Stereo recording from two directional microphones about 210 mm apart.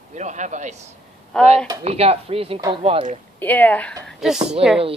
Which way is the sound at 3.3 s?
10° left (ahead or behind).